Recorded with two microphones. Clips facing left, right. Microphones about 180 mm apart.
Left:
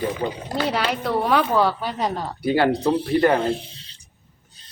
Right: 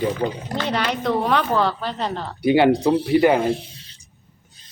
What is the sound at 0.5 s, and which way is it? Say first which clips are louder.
A woman's voice: left 4 dB; 5° left (ahead or behind).